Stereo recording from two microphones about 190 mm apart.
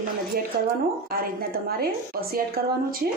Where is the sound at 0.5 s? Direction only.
55° right (ahead or behind).